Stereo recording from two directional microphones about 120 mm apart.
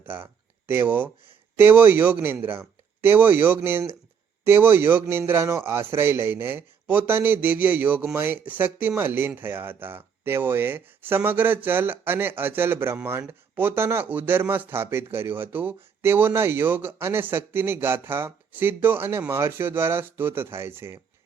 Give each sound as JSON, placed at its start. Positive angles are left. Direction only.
{"t": 0.0, "sound": "speech", "side_deg": -15}